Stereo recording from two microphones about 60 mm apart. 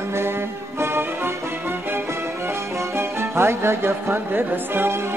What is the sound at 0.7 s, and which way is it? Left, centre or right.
Music, right.